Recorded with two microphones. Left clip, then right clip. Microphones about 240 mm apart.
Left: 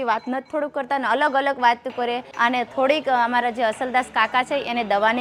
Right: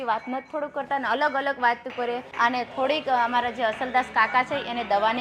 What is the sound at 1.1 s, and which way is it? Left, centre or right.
A woman's voice, left.